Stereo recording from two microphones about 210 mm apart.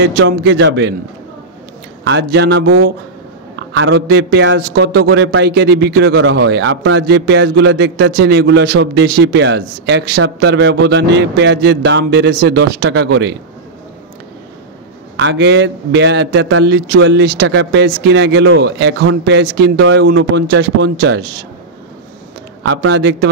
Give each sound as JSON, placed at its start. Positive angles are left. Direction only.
{"t": 0.0, "sound": "a man's voice", "side_deg": -55}
{"t": 2.0, "sound": "a man's voice", "side_deg": -55}
{"t": 15.1, "sound": "a man's voice", "side_deg": -60}
{"t": 22.6, "sound": "a man's voice", "side_deg": -55}